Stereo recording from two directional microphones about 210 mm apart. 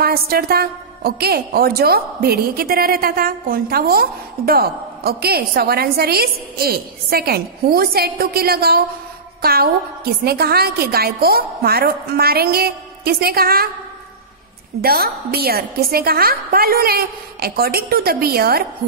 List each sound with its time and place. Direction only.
0.0 s a woman's voice: 45° right (ahead or behind)
14.8 s a woman's voice: 45° right (ahead or behind)